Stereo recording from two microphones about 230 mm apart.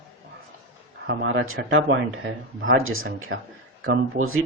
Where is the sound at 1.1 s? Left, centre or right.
Right.